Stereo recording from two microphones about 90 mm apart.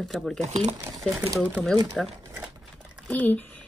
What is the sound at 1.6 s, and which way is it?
Speech, 5° left (ahead or behind).